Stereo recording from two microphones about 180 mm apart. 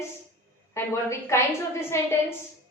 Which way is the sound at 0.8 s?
15° left (ahead or behind).